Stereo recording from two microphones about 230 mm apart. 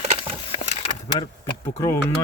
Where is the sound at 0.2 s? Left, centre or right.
Left.